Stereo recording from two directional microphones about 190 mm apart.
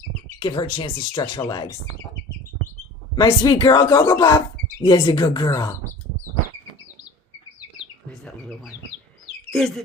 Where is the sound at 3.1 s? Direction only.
20° left (ahead or behind).